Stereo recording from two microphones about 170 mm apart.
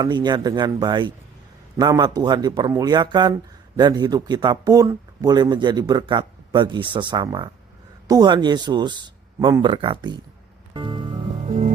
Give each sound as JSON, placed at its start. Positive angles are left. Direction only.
{"t": 0.0, "sound": "speech", "side_deg": -25}
{"t": 10.8, "sound": "music", "side_deg": -30}